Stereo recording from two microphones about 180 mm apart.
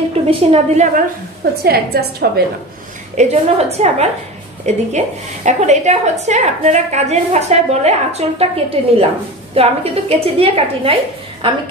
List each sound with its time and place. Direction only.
0.3 s a woman's voice: 30° right (ahead or behind)
1.6 s a woman's voice: 60° right (ahead or behind)
3.2 s a woman's voice: 35° right (ahead or behind)